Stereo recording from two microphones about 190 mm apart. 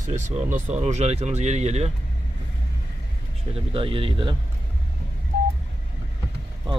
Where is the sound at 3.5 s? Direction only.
30° right (ahead or behind).